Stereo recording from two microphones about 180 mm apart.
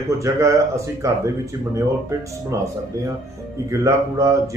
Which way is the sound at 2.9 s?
20° right (ahead or behind).